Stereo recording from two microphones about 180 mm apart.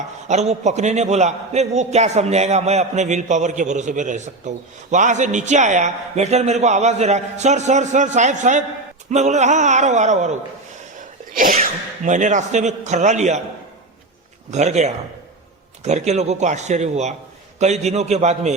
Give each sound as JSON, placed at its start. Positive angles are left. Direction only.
{"t": 0.3, "sound": "a man's voice", "side_deg": -40}
{"t": 11.3, "sound": "sneeze", "side_deg": -50}
{"t": 12.0, "sound": "a man's voice", "side_deg": -45}
{"t": 14.5, "sound": "a man's voice", "side_deg": -40}